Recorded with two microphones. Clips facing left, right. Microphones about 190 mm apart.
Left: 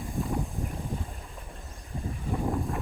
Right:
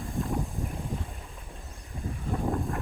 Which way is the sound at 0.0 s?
Centre (ahead or behind).